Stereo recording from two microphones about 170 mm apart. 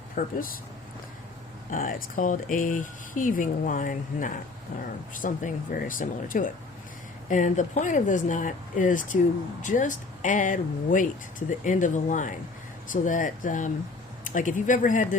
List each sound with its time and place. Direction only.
0.2 s speech: 55° left (ahead or behind)
1.7 s speech: 55° left (ahead or behind)